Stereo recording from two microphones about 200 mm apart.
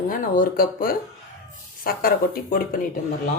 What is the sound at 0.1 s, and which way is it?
Speech, 45° left (ahead or behind).